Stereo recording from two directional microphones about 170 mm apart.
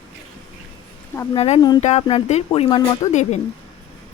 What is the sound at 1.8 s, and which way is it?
Speech, 40° left (ahead or behind).